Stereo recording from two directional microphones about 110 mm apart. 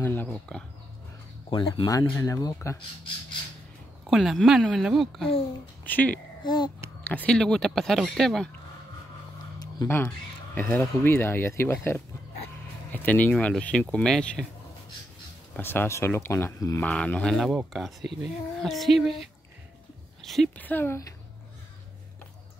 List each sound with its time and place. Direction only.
0.0 s speech: 15° left (ahead or behind)
1.5 s speech: 50° left (ahead or behind)
2.1 s speech: 20° left (ahead or behind)
4.1 s speech: centre (ahead or behind)
5.9 s speech: 15° left (ahead or behind)
6.4 s speech: 45° left (ahead or behind)
7.0 s speech: 15° left (ahead or behind)
10.0 s speech: 15° left (ahead or behind)
15.5 s speech: 20° left (ahead or behind)
16.8 s speech: 10° left (ahead or behind)
20.2 s a sound: centre (ahead or behind)
20.5 s speech: 15° left (ahead or behind)